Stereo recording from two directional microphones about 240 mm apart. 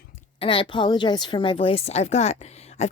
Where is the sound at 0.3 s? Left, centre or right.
Left.